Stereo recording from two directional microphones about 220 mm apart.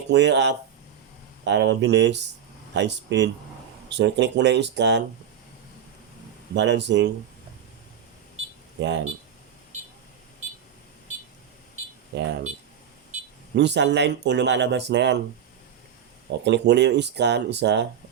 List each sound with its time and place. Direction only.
0.1 s speech: 50° right (ahead or behind)
6.5 s speech: 50° right (ahead or behind)
8.8 s speech: 55° right (ahead or behind)
12.1 s speech: 50° right (ahead or behind)
13.6 s speech: 50° right (ahead or behind)
16.4 s speech: 50° right (ahead or behind)